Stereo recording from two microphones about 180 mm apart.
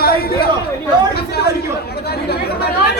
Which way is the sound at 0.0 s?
60° left (ahead or behind).